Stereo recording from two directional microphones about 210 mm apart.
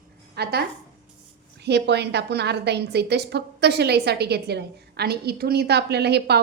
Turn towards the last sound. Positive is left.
turn(degrees=-50)  # may be behind; listen again after turning